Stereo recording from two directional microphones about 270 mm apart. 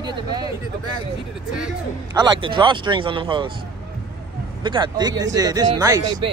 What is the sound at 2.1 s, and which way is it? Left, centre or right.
A man's voice, centre.